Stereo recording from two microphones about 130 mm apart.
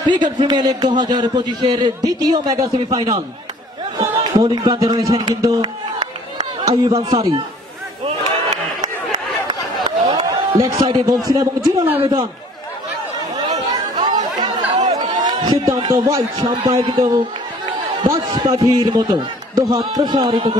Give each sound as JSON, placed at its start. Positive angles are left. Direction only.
{"t": 0.1, "sound": "a man's voice", "side_deg": -35}
{"t": 6.9, "sound": "a man's voice", "side_deg": -50}
{"t": 9.8, "sound": "a sound", "side_deg": -35}
{"t": 10.8, "sound": "a man's voice", "side_deg": -30}
{"t": 13.5, "sound": "chatter", "side_deg": -35}
{"t": 15.2, "sound": "a man's voice", "side_deg": -30}